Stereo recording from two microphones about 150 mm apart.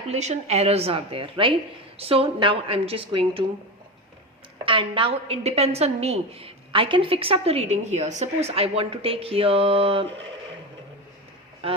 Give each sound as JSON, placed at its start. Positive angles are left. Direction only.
{"t": 0.1, "sound": "a woman's voice", "side_deg": -50}
{"t": 4.6, "sound": "a woman's voice", "side_deg": -35}
{"t": 11.6, "sound": "speech", "side_deg": -40}